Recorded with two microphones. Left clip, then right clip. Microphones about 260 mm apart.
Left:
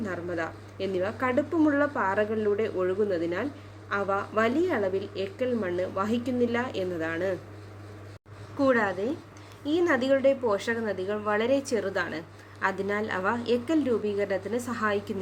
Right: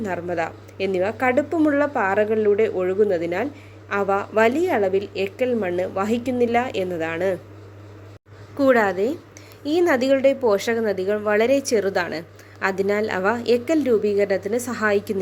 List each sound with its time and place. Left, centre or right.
0.0 s speech: right
8.5 s speech: right